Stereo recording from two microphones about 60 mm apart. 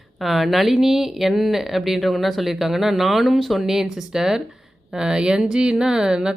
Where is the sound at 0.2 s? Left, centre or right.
Centre.